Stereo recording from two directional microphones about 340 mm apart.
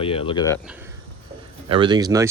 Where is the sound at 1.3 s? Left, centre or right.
Centre.